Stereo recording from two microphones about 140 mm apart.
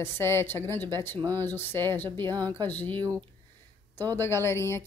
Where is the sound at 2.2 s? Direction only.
30° right (ahead or behind).